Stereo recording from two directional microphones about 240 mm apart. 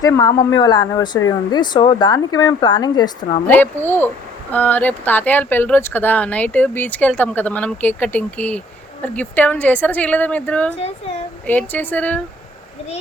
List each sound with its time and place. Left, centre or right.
0.0 s speech: centre